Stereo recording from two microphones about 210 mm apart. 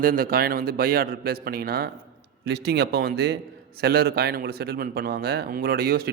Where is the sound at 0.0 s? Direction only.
45° right (ahead or behind).